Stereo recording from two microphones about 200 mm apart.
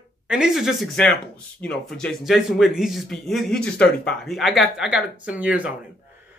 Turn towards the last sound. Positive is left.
turn(degrees=-5)  # may be behind; listen again after turning